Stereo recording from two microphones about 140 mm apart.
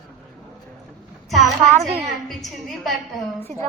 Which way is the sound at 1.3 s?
Centre (ahead or behind).